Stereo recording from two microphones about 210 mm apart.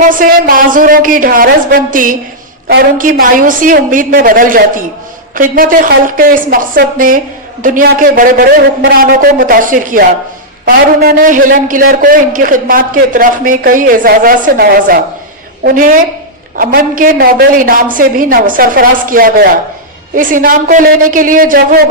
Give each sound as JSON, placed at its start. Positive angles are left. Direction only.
{"t": 0.0, "sound": "a man's voice", "side_deg": -40}